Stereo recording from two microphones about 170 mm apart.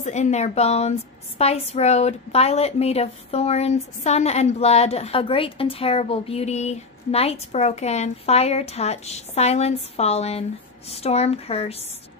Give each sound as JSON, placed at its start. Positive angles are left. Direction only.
{"t": 0.0, "sound": "a woman's voice", "side_deg": 45}